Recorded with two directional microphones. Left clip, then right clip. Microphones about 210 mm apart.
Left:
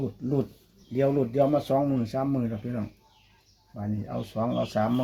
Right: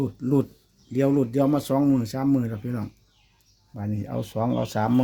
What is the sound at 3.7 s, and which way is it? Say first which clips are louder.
Speech: right 2 dB; 60° right (ahead or behind).